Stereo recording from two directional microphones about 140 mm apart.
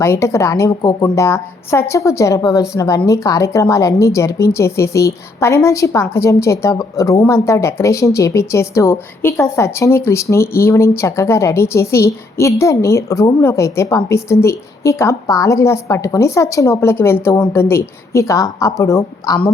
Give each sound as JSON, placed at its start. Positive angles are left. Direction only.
{"t": 0.0, "sound": "speech", "side_deg": 20}